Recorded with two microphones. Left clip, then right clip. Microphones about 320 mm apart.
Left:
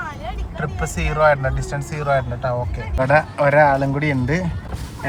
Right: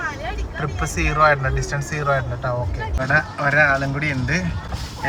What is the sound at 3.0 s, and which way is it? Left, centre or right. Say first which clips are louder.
Speech: left 4 dB; centre.